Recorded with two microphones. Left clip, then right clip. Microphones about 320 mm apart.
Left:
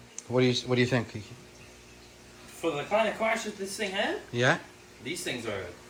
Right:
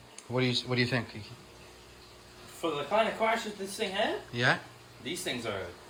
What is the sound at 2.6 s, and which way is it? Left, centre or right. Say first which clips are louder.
Speech: left 1 dB; centre.